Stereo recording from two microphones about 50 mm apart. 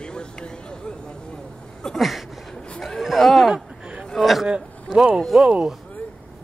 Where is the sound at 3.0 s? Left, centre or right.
Centre.